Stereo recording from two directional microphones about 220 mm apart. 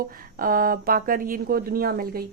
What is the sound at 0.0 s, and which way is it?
Speech, 40° right (ahead or behind).